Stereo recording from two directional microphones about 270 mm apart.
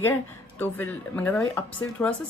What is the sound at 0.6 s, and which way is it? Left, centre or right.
Speech, centre.